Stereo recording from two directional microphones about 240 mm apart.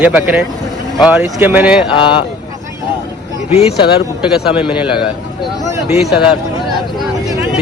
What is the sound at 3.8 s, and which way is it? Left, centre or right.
Speech, left.